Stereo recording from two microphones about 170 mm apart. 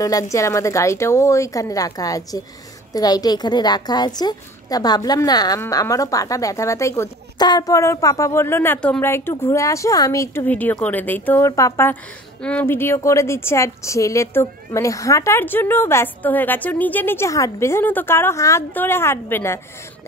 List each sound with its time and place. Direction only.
0.0 s a woman's voice: 20° left (ahead or behind)